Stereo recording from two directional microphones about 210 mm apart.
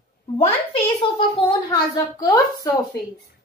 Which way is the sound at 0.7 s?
25° left (ahead or behind).